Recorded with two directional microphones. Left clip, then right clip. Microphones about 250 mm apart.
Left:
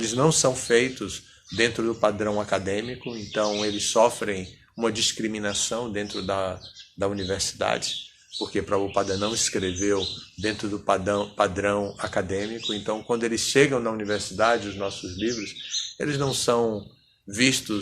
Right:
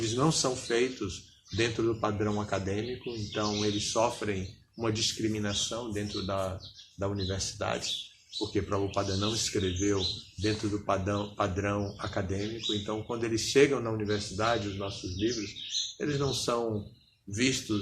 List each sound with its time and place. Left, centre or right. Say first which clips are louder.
0.0 s speech: left 7 dB; left
16.0 s speech: left 7 dB; left